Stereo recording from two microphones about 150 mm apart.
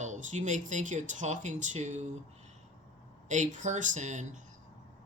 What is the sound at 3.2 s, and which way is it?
Speech, 55° right (ahead or behind).